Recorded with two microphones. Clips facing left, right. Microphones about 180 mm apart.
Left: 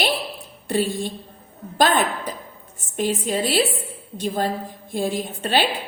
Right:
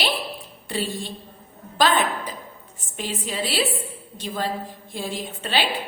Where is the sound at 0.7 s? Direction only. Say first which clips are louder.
Left 6 dB; 50° left (ahead or behind).